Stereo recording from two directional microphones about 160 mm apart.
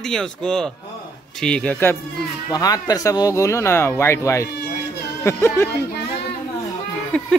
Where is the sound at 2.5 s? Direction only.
25° left (ahead or behind).